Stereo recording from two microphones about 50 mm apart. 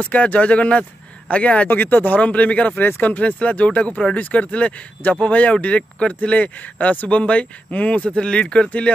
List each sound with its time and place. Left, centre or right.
0.0 s speech: left
1.7 s speech: left